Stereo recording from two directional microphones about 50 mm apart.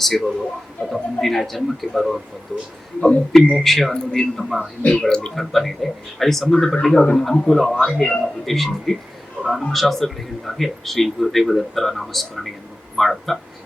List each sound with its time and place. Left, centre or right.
0.0 s speech: centre
3.3 s a man's voice: centre
4.4 s speech: centre
4.8 s speech: left
5.3 s a man's voice: centre
8.4 s speech: centre